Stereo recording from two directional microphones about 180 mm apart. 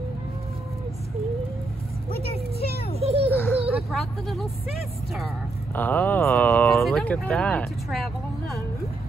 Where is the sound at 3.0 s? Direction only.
35° right (ahead or behind).